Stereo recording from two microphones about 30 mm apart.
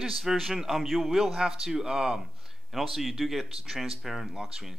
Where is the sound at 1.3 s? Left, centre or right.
Centre.